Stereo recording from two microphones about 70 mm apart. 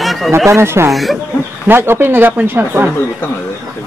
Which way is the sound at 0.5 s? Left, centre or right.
Right.